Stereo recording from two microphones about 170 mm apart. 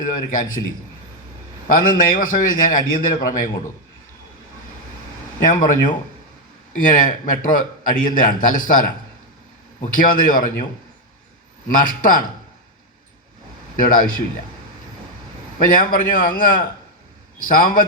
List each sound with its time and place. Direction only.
0.0 s a man's voice: 50° left (ahead or behind)
1.6 s a man's voice: 55° left (ahead or behind)
5.5 s a man's voice: 50° left (ahead or behind)
6.7 s a man's voice: 55° left (ahead or behind)
9.9 s a man's voice: 55° left (ahead or behind)
11.7 s a man's voice: 55° left (ahead or behind)
13.7 s a man's voice: 55° left (ahead or behind)
15.5 s a man's voice: 55° left (ahead or behind)